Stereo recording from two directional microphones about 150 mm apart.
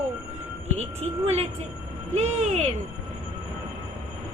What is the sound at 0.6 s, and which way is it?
Speech, 45° right (ahead or behind).